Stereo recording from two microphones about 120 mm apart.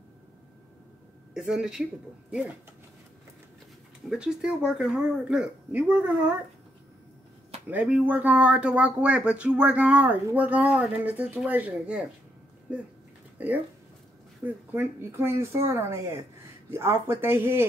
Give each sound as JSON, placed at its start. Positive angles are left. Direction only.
{"t": 1.3, "sound": "speech", "side_deg": -5}
{"t": 4.1, "sound": "speech", "side_deg": -5}
{"t": 7.7, "sound": "speech", "side_deg": -15}